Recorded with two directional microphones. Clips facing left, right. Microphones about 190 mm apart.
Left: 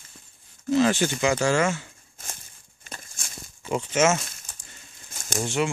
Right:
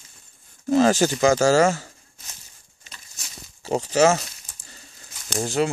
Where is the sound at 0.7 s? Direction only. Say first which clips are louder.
Right 3 dB; 40° right (ahead or behind).